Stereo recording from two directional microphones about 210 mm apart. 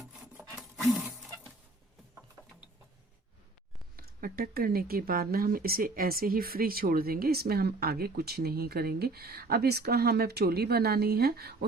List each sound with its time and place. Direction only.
0.0 s rub: centre (ahead or behind)
3.9 s speech: 45° right (ahead or behind)